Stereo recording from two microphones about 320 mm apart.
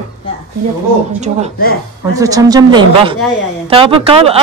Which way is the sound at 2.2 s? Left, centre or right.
Centre.